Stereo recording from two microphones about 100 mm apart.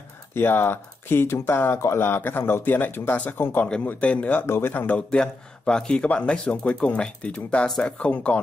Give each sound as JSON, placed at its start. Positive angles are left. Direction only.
{"t": 0.3, "sound": "speech", "side_deg": 25}